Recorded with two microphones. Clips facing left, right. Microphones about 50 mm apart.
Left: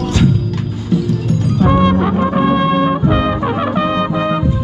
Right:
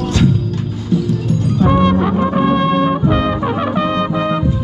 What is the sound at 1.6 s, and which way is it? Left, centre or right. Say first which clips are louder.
Music: left 1 dB; left.